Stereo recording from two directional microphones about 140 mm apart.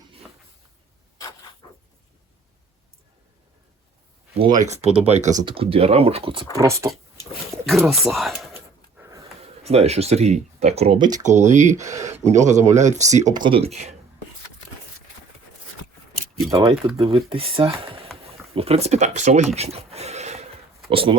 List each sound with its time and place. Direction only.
0.2 s a sound: 5° right (ahead or behind)
4.5 s speech: 55° right (ahead or behind)
5.3 s speech: 25° right (ahead or behind)
5.5 s speech: 40° right (ahead or behind)
6.6 s speech: 20° right (ahead or behind)
7.5 s speech: centre (ahead or behind)
8.5 s a sound: 20° right (ahead or behind)
9.6 s speech: 50° right (ahead or behind)
11.2 s speech: 60° right (ahead or behind)
11.8 s speech: 20° right (ahead or behind)
12.2 s speech: 55° right (ahead or behind)
13.3 s speech: 35° right (ahead or behind)
16.6 s speech: 40° right (ahead or behind)
20.9 s speech: 40° right (ahead or behind)